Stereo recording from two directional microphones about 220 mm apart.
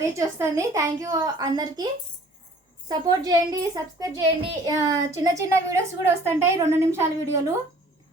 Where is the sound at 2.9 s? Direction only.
15° right (ahead or behind).